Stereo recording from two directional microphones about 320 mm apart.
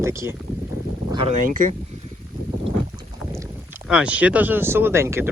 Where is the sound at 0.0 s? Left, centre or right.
Centre.